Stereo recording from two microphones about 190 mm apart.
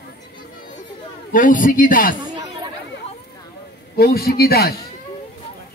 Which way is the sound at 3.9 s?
55° left (ahead or behind).